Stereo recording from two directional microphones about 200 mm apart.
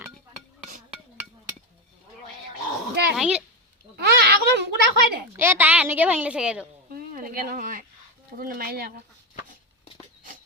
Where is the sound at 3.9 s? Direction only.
50° right (ahead or behind).